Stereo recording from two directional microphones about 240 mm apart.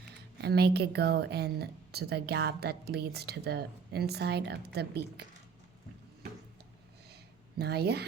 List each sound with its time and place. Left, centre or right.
0.4 s a woman's voice: right
7.6 s a woman's voice: right